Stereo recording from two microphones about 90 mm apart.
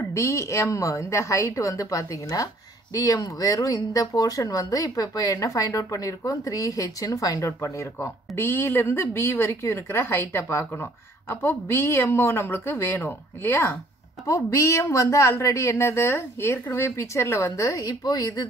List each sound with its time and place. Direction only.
0.1 s a woman's voice: 35° left (ahead or behind)
14.2 s a woman's voice: 35° left (ahead or behind)
18.0 s speech: 50° left (ahead or behind)